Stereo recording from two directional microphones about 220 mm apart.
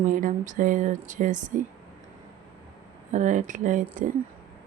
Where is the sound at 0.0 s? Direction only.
35° right (ahead or behind).